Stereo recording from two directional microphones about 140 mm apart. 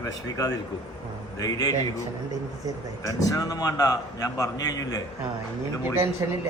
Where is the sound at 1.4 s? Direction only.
25° left (ahead or behind).